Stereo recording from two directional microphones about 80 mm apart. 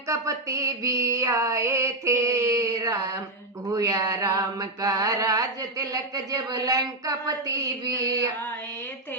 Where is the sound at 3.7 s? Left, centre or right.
Right.